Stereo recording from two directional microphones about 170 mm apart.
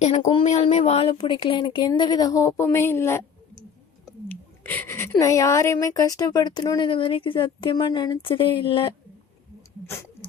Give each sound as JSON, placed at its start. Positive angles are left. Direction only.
{"t": 0.0, "sound": "a woman's voice", "side_deg": 35}
{"t": 9.8, "sound": "speech", "side_deg": 15}